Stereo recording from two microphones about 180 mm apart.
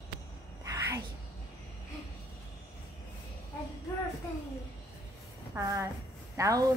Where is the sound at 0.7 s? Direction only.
20° right (ahead or behind).